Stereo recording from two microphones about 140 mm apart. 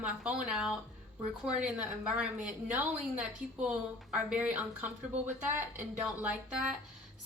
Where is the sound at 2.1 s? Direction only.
10° right (ahead or behind).